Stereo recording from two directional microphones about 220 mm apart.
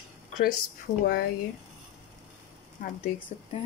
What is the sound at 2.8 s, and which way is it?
Speech, 40° left (ahead or behind).